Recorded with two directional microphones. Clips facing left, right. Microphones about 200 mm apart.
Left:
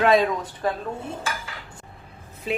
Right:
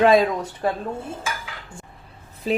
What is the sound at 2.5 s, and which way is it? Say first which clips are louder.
Speech: right 4 dB; 40° right (ahead or behind).